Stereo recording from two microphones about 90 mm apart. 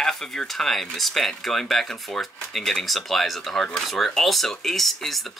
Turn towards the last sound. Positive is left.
turn(degrees=0)  # may be behind; listen again after turning